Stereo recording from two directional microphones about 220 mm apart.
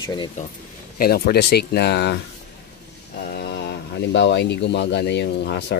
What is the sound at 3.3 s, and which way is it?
Speech, 50° left (ahead or behind).